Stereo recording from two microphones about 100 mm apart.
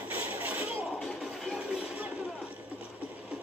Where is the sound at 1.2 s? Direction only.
Centre (ahead or behind).